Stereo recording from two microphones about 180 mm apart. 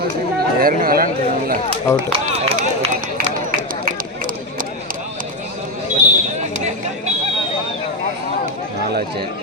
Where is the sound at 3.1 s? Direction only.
55° right (ahead or behind).